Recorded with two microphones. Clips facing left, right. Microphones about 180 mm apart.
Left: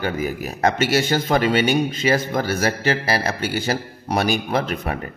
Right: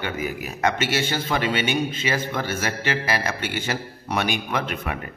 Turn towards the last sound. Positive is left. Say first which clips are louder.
# left 4 dB
turn(degrees=35)  # may be behind; listen again after turning